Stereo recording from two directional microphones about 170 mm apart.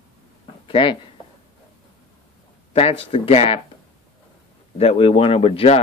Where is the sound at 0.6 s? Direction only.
30° left (ahead or behind).